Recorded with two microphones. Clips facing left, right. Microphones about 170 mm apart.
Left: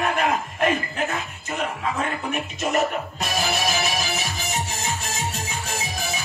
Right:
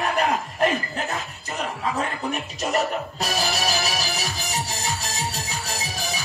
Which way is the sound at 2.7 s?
35° right (ahead or behind).